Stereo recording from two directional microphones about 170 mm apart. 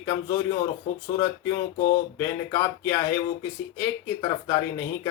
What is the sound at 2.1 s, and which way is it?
Speech, 15° left (ahead or behind).